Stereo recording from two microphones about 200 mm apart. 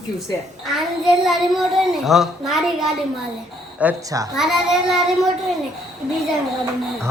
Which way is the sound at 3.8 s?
15° right (ahead or behind).